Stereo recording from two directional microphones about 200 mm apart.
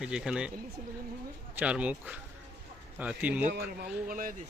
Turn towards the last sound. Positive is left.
turn(degrees=-45)  # may be behind; listen again after turning